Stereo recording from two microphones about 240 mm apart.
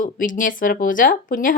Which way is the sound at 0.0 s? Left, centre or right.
Left.